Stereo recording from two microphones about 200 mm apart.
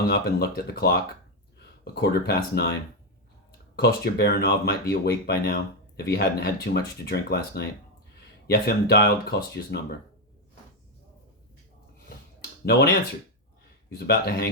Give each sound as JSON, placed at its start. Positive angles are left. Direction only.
{"t": 0.1, "sound": "speech", "side_deg": 50}
{"t": 12.6, "sound": "speech", "side_deg": 55}
{"t": 14.1, "sound": "speech", "side_deg": 50}